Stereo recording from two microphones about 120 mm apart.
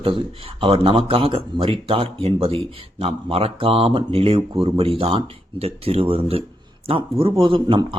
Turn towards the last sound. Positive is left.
turn(degrees=-45)  # may be behind; listen again after turning